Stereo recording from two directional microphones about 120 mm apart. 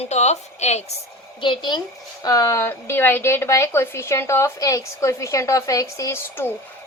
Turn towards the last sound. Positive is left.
turn(degrees=20)  # may be behind; listen again after turning